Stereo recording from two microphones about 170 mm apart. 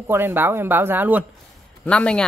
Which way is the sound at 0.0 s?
15° right (ahead or behind).